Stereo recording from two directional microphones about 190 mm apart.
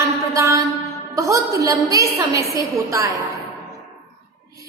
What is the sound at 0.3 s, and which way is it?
Mantra, 15° right (ahead or behind).